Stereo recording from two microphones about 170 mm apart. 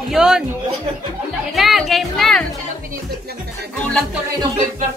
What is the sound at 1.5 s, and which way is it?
Speech, centre (ahead or behind).